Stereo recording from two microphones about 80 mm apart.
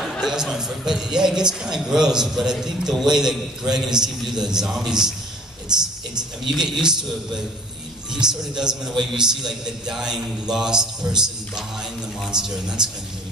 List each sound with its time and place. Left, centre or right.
0.0 s a man's voice: centre